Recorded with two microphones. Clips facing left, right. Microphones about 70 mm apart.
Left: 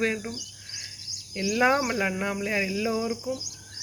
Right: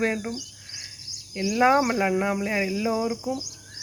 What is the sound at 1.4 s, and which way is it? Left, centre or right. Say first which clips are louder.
Speech: right 3 dB; right.